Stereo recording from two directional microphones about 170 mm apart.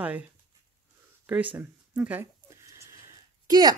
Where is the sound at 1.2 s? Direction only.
10° right (ahead or behind).